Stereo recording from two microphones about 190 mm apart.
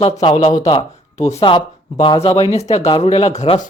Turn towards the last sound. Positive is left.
turn(degrees=35)  # may be behind; listen again after turning